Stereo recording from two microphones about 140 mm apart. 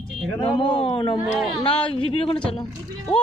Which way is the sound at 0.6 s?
35° left (ahead or behind).